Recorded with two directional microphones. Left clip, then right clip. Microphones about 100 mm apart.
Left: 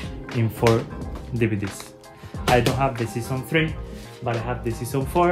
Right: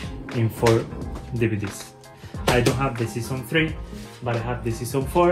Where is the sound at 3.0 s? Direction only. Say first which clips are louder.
Left 1 dB; centre (ahead or behind).